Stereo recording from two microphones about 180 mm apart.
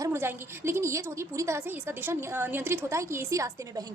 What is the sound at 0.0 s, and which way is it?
A woman's voice, 15° right (ahead or behind).